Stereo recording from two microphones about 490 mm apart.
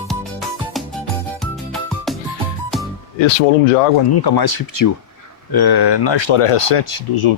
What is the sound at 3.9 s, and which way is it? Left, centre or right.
Speech, left.